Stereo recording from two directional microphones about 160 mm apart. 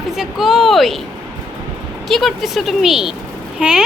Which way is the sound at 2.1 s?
Centre (ahead or behind).